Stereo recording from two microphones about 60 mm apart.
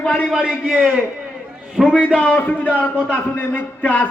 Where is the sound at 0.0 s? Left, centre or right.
Left.